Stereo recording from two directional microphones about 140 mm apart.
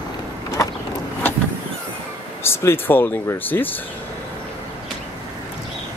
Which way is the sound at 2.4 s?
15° left (ahead or behind).